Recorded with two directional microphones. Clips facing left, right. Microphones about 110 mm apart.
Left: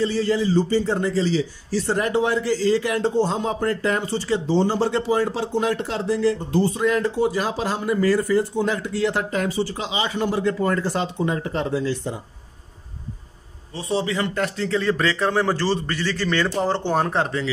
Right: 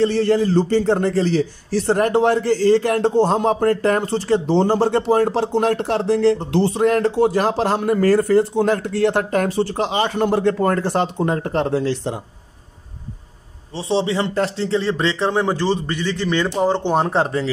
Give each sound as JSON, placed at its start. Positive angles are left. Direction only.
{"t": 0.0, "sound": "a man's voice", "side_deg": -60}
{"t": 13.7, "sound": "a man's voice", "side_deg": -25}